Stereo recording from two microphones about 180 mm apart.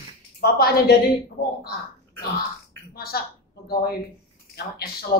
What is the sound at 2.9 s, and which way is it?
A woman's voice, 60° left (ahead or behind).